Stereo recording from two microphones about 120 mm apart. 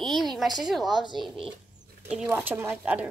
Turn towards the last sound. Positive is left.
turn(degrees=-15)  # may be behind; listen again after turning